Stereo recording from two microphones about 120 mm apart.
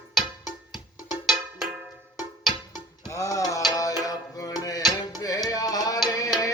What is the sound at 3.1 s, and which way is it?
Music, 25° left (ahead or behind).